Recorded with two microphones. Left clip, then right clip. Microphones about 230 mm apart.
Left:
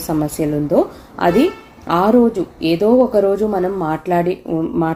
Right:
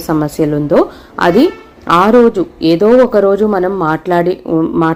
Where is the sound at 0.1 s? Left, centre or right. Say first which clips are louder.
Right 5 dB; right.